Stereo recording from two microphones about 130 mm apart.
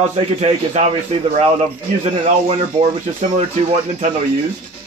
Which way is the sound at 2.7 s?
50° right (ahead or behind).